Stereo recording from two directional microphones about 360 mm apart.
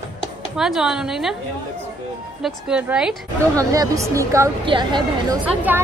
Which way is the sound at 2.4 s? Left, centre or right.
Centre.